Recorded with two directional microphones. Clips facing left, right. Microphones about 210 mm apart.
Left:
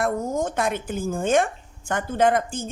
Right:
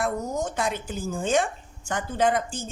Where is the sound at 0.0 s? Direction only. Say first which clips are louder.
Left 3 dB; 50° left (ahead or behind).